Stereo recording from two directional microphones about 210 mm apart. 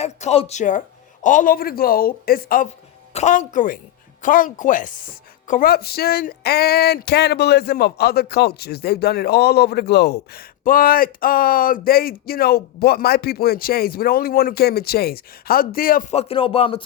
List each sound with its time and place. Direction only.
0.0 s speech: 30° left (ahead or behind)
3.1 s speech: 35° left (ahead or behind)